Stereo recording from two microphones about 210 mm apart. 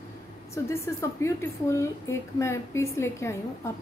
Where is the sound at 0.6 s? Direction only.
15° left (ahead or behind).